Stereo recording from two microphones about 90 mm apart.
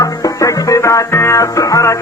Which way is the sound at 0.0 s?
35° left (ahead or behind).